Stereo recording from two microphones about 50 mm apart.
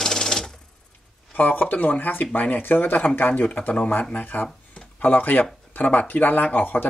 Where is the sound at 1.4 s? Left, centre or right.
Left.